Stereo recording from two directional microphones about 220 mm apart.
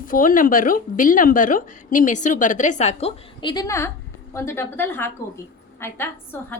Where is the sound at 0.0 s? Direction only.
40° left (ahead or behind).